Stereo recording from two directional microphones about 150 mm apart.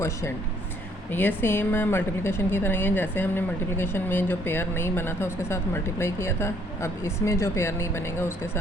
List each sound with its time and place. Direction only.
0.0 s a woman's voice: 20° left (ahead or behind)